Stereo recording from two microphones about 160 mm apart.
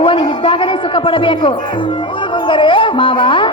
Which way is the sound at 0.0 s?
30° left (ahead or behind).